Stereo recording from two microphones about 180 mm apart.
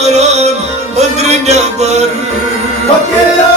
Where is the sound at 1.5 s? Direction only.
40° right (ahead or behind).